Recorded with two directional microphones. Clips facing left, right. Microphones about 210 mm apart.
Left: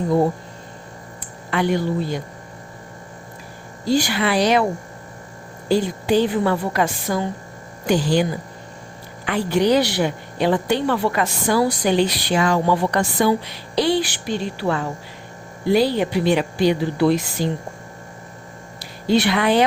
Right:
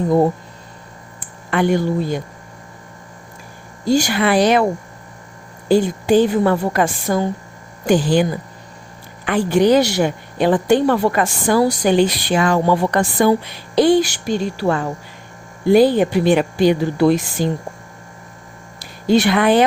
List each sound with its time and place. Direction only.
1.2 s speech: 50° right (ahead or behind)
3.8 s a woman's voice: 45° right (ahead or behind)
5.6 s a woman's voice: 50° right (ahead or behind)
18.8 s a woman's voice: 45° right (ahead or behind)